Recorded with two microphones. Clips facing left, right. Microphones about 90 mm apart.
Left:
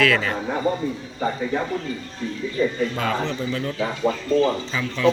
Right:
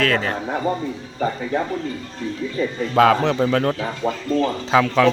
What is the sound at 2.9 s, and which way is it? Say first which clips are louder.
Speech: right 9 dB; 85° right.